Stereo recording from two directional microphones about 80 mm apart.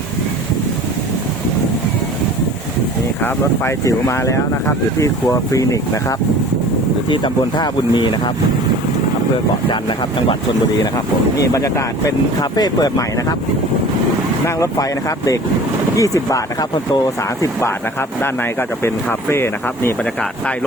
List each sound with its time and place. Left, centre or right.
3.2 s speech: left
3.8 s speech: left
7.1 s speech: left
11.5 s speech: left
12.4 s speech: left
14.4 s speech: left
19.3 s speech: left